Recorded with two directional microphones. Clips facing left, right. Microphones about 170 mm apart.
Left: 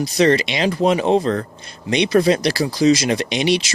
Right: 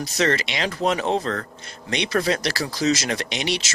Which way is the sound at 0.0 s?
15° left (ahead or behind).